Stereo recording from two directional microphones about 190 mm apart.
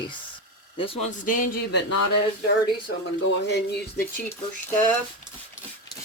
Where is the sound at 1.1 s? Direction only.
45° left (ahead or behind).